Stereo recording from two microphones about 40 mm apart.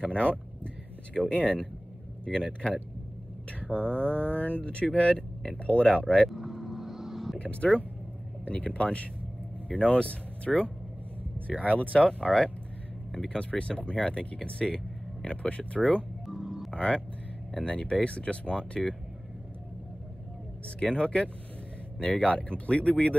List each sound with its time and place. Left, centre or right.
0.0 s speech: left
1.4 s speech: left
6.3 s vehicle: centre
7.3 s speech: left
16.3 s music: centre
16.7 s speech: left
20.9 s speech: left